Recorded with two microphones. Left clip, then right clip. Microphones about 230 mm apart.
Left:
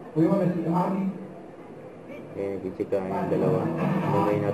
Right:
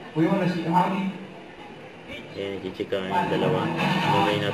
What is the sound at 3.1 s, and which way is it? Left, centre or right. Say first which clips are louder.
A man's voice: right 4 dB; right.